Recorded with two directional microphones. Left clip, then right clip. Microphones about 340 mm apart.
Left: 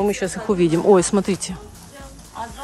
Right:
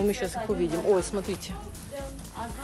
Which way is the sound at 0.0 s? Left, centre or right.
Left.